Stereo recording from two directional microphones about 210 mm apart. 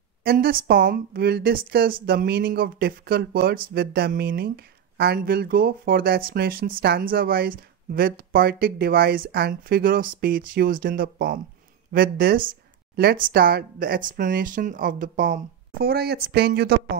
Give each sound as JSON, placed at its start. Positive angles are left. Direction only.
{"t": 0.2, "sound": "speech", "side_deg": -45}